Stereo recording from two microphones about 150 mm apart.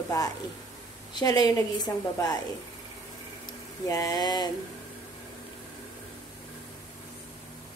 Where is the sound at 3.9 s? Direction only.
25° left (ahead or behind).